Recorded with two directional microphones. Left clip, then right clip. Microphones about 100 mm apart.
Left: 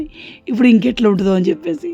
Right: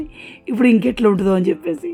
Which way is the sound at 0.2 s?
40° left (ahead or behind).